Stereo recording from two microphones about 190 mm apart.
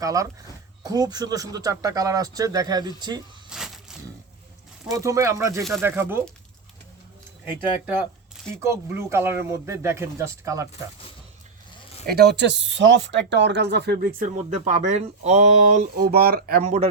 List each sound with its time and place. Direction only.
0.0 s speech: 20° right (ahead or behind)
3.5 s a sound: centre (ahead or behind)
4.9 s speech: 15° right (ahead or behind)
8.6 s speech: 15° right (ahead or behind)
12.0 s speech: 60° right (ahead or behind); by 15.8 s 35° right (ahead or behind)
16.0 s speech: 50° right (ahead or behind)